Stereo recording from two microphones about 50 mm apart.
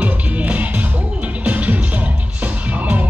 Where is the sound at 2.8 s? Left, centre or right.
Right.